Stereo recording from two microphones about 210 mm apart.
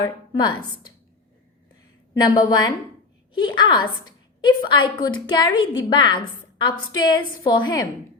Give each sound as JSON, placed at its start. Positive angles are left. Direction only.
{"t": 0.3, "sound": "a woman's voice", "side_deg": 20}
{"t": 2.3, "sound": "a woman's voice", "side_deg": 20}